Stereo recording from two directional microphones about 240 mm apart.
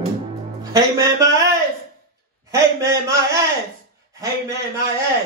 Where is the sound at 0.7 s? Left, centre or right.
Centre.